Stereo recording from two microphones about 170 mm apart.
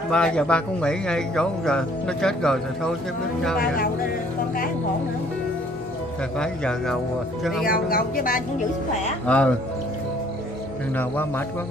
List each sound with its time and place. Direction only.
0.1 s speech: 5° left (ahead or behind)
3.5 s speech: 60° left (ahead or behind)
6.3 s speech: 5° left (ahead or behind)
7.6 s speech: 60° left (ahead or behind)
9.2 s speech: 5° left (ahead or behind)
11.0 s speech: 10° left (ahead or behind)